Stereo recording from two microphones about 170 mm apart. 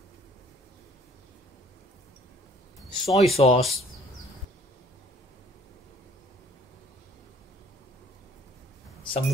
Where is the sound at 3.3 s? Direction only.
35° left (ahead or behind).